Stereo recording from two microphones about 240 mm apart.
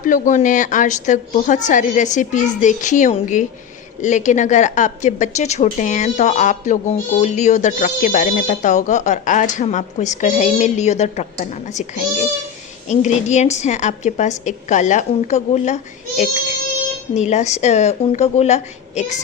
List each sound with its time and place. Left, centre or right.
0.0 s a woman's voice: left
12.9 s a woman's voice: left